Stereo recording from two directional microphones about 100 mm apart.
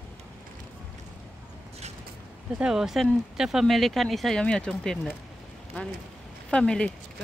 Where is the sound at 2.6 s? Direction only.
5° right (ahead or behind).